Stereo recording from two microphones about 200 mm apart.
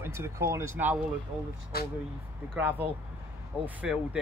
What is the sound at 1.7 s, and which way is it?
Speech, 50° left (ahead or behind).